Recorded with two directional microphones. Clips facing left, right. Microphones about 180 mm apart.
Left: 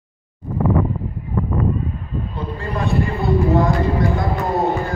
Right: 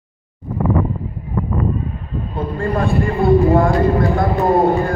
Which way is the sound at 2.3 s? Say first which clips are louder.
Right 8 dB; 50° right (ahead or behind).